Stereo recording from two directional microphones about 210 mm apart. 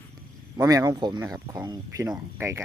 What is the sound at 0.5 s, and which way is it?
Speech, 15° right (ahead or behind).